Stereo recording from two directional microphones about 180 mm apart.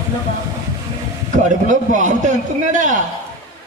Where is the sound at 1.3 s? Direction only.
45° right (ahead or behind).